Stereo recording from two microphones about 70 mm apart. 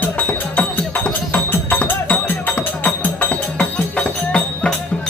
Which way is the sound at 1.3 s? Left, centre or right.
Left.